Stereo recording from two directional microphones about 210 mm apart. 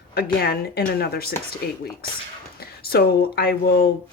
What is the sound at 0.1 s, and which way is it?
Speech, 50° left (ahead or behind).